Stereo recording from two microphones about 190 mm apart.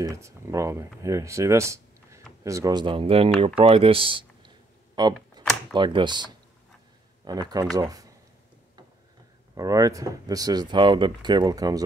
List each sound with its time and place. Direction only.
0.0 s speech: 15° right (ahead or behind)
5.4 s a sound: 20° right (ahead or behind)
5.8 s speech: 25° right (ahead or behind)
7.2 s speech: 20° right (ahead or behind)
9.6 s speech: 20° right (ahead or behind)